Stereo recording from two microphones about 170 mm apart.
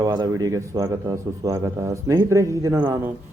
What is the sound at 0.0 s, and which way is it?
A man's voice, 20° right (ahead or behind).